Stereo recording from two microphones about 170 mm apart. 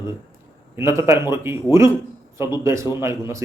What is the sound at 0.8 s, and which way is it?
Speech, 15° right (ahead or behind).